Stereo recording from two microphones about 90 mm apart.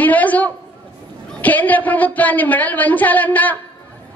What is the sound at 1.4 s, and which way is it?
A woman's voice, 20° left (ahead or behind).